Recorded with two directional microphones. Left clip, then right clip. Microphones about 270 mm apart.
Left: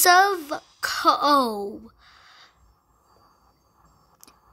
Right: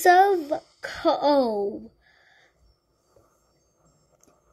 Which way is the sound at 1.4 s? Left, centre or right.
Left.